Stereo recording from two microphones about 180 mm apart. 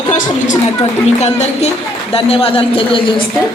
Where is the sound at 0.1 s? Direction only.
45° left (ahead or behind).